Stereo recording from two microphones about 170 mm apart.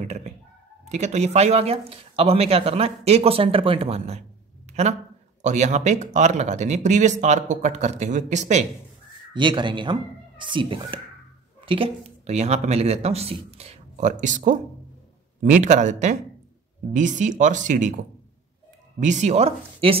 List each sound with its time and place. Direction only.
0.0 s speech: 40° right (ahead or behind)
9.3 s speech: 25° right (ahead or behind)